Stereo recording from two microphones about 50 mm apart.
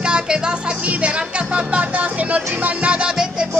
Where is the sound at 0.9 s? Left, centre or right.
Right.